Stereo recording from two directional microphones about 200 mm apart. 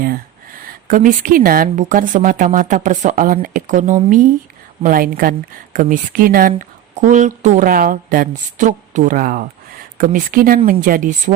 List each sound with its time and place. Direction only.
0.9 s a woman's voice: 40° right (ahead or behind)